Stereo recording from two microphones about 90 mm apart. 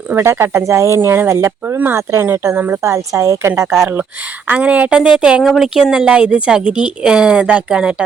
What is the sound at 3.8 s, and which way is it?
Speech, 20° right (ahead or behind).